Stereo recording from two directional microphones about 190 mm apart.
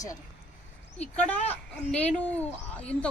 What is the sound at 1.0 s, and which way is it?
Speech, 10° left (ahead or behind).